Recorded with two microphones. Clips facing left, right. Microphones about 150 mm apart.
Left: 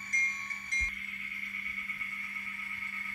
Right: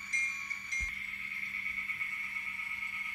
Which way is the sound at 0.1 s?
50° left (ahead or behind).